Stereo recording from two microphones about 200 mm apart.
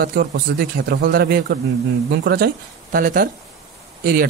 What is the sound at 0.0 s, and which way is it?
Speech, 55° right (ahead or behind).